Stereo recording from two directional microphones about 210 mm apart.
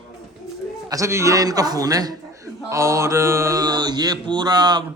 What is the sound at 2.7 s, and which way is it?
Mantra, 15° right (ahead or behind).